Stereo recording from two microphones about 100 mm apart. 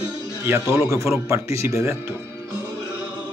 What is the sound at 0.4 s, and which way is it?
Speech, 30° right (ahead or behind).